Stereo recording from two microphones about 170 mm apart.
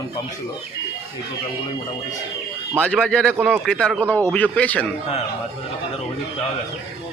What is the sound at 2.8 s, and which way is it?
A man's voice, 5° left (ahead or behind).